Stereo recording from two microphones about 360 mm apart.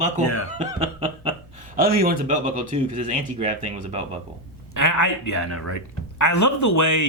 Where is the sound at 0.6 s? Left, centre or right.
Centre.